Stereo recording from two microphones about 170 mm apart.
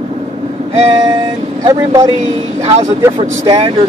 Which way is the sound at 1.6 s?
25° right (ahead or behind).